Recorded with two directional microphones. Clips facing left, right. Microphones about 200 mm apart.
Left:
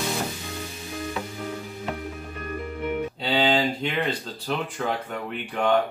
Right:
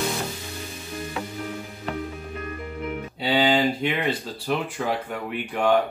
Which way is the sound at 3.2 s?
10° right (ahead or behind).